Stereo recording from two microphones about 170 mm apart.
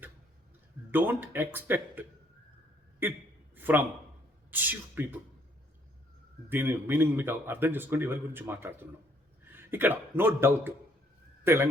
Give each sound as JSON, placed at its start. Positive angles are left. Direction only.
{"t": 0.9, "sound": "a man's voice", "side_deg": -10}
{"t": 3.5, "sound": "a sound", "side_deg": -10}
{"t": 4.5, "sound": "a man's voice", "side_deg": -10}
{"t": 6.5, "sound": "a man's voice", "side_deg": -10}